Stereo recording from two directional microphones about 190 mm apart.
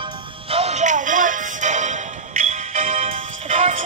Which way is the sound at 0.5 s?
35° right (ahead or behind).